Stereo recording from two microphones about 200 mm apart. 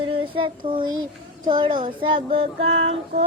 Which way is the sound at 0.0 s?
25° right (ahead or behind).